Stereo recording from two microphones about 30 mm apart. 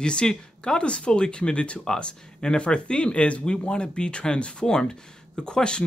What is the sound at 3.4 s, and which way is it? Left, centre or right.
Speech, left.